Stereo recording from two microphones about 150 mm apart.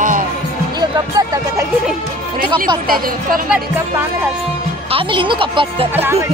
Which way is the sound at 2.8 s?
75° right (ahead or behind).